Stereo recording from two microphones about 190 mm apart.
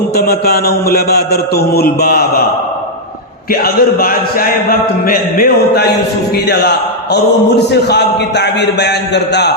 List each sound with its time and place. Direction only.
0.1 s a man's voice: 55° left (ahead or behind)
3.5 s a man's voice: 50° left (ahead or behind)